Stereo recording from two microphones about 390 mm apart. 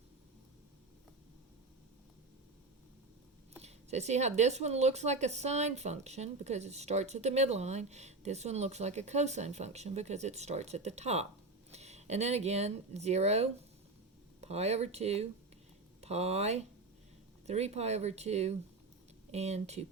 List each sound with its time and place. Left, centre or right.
3.6 s speech: centre